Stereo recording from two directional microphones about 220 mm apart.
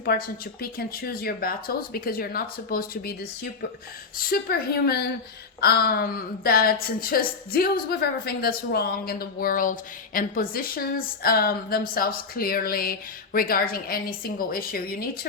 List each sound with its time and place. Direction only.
0.0 s a woman's voice: 45° left (ahead or behind)
4.2 s a woman's voice: 40° left (ahead or behind)